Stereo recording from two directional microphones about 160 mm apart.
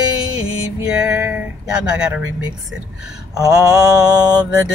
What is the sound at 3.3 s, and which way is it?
Mantra, 20° right (ahead or behind).